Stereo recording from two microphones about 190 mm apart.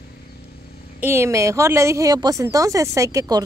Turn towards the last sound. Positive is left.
turn(degrees=-20)  # may be behind; listen again after turning